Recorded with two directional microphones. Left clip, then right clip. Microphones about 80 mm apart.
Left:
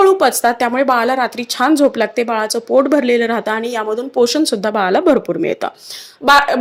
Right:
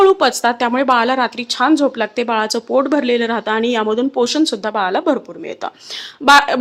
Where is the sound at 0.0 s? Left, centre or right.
Left.